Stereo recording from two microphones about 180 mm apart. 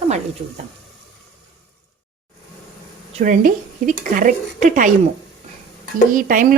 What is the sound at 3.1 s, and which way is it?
Speech, 45° right (ahead or behind).